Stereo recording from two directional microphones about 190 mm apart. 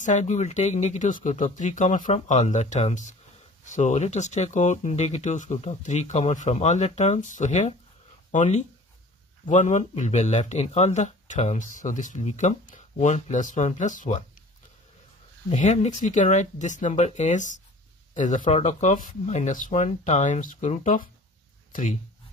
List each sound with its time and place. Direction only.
0.0 s speech: 40° left (ahead or behind)
15.5 s speech: 35° left (ahead or behind)